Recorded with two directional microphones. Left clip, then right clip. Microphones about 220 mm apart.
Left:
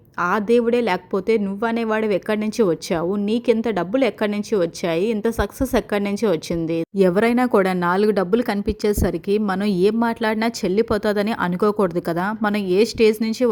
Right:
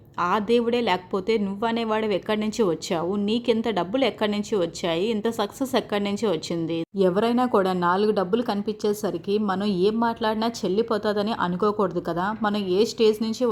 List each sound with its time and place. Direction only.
0.2 s a woman's voice: 25° left (ahead or behind)